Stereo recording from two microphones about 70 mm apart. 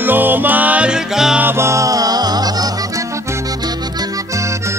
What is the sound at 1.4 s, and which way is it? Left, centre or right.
Music, right.